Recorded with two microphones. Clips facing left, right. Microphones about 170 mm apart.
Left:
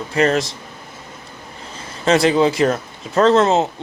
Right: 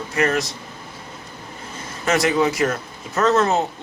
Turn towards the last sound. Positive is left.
turn(degrees=25)  # may be behind; listen again after turning